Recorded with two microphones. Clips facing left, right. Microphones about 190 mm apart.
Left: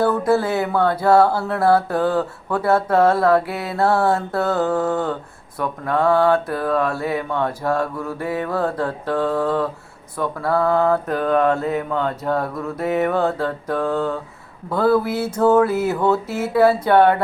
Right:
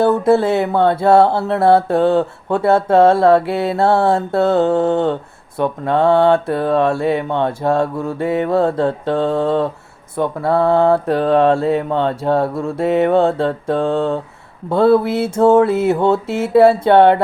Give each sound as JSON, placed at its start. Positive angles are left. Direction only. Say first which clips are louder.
{"t": 0.0, "sound": "speech", "louder": "right 5 dB", "side_deg": -25}